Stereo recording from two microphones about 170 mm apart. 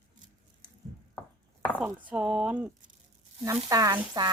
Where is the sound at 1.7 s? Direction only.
5° right (ahead or behind).